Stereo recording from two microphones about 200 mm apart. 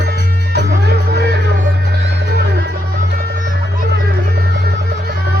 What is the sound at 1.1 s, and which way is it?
Music, 55° right (ahead or behind).